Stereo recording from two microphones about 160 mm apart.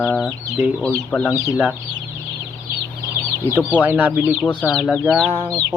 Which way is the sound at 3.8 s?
10° right (ahead or behind).